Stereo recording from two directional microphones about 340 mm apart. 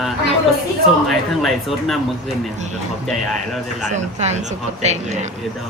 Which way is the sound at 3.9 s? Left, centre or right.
Centre.